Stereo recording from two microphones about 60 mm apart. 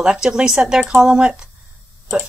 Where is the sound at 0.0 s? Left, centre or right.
Centre.